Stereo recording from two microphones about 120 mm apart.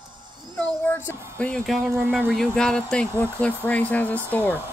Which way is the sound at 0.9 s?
20° left (ahead or behind).